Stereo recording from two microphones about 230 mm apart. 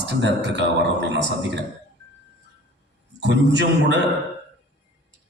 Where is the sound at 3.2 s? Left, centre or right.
Right.